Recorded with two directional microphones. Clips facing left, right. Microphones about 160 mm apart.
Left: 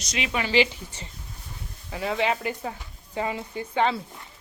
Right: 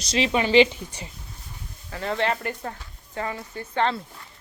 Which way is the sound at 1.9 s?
5° left (ahead or behind).